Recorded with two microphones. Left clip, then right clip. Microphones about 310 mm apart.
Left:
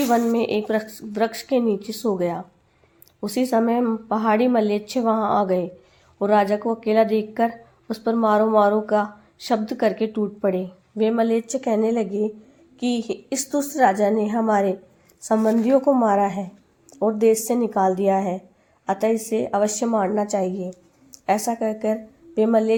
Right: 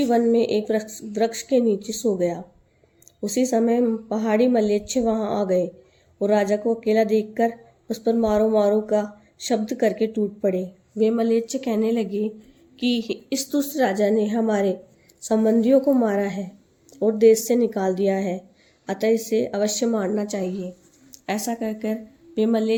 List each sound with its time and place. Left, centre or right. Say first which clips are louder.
0.1 s a woman's voice: right 3 dB; centre